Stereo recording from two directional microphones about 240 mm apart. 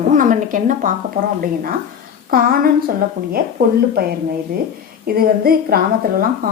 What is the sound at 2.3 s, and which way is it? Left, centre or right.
A woman's voice, right.